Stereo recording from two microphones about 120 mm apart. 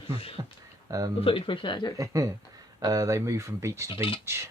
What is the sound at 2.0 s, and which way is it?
Speech, 25° right (ahead or behind).